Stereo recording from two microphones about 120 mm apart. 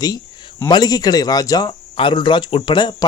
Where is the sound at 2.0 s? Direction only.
45° left (ahead or behind).